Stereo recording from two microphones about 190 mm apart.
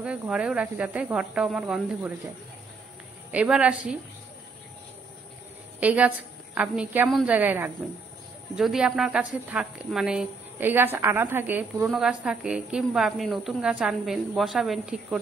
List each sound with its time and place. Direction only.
0.0 s speech: 5° right (ahead or behind)
3.3 s a woman's voice: 5° right (ahead or behind)
5.8 s a woman's voice: 10° right (ahead or behind)